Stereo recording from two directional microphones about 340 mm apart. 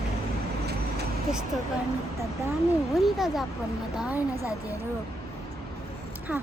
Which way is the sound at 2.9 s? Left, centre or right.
Centre.